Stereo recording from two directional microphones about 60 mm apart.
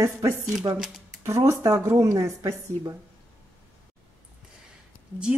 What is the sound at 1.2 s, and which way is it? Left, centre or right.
A woman's voice, right.